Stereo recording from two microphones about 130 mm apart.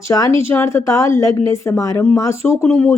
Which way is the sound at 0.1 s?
25° left (ahead or behind).